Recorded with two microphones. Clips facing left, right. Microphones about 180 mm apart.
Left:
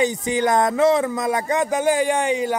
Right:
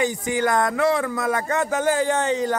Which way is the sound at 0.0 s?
20° left (ahead or behind).